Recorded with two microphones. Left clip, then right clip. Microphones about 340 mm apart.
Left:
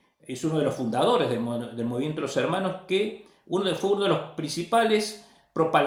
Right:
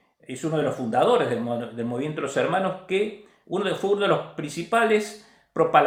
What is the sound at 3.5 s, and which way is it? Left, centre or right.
Speech, centre.